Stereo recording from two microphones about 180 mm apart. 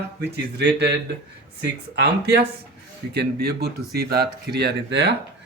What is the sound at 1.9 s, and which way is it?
Speech, 65° right (ahead or behind).